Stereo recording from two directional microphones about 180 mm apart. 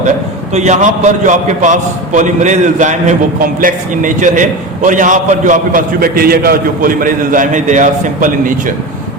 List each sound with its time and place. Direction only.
0.5 s a man's voice: 40° right (ahead or behind)